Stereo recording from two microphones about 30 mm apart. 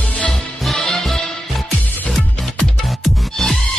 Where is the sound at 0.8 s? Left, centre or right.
Centre.